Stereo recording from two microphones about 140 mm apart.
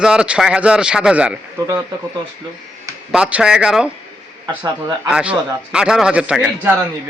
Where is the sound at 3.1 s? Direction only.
5° right (ahead or behind).